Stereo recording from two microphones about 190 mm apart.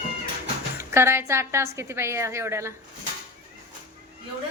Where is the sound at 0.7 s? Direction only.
15° right (ahead or behind).